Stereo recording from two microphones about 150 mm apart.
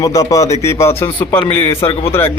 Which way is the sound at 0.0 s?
20° left (ahead or behind).